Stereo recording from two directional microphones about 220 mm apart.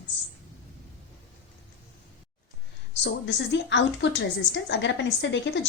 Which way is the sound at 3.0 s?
55° left (ahead or behind).